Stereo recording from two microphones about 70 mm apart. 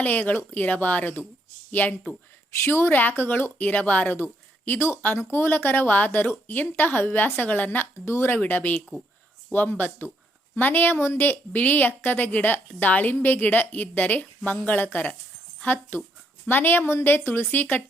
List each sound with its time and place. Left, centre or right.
0.0 s a woman's voice: left
8.0 s speech: left
8.4 s a woman's voice: left